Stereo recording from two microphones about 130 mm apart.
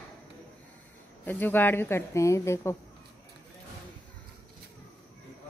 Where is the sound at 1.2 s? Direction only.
15° left (ahead or behind).